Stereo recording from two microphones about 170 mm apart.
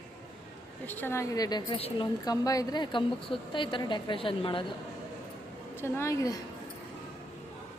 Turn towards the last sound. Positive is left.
turn(degrees=20)  # may be behind; listen again after turning